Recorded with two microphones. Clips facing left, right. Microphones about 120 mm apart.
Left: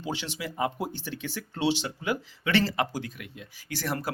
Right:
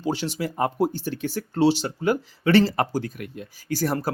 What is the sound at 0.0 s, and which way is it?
Speech, 40° right (ahead or behind).